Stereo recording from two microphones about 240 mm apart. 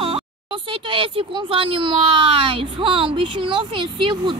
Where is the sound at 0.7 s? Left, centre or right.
Right.